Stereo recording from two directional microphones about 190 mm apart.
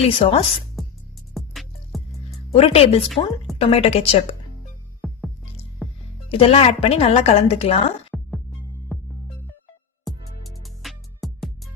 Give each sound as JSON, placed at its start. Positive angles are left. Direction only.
{"t": 0.1, "sound": "a woman's voice", "side_deg": 30}
{"t": 1.3, "sound": "music", "side_deg": 0}
{"t": 2.5, "sound": "a woman's voice", "side_deg": 30}
{"t": 4.9, "sound": "music", "side_deg": 0}
{"t": 6.3, "sound": "a woman's voice", "side_deg": 30}
{"t": 8.1, "sound": "music", "side_deg": 0}
{"t": 10.1, "sound": "music", "side_deg": 0}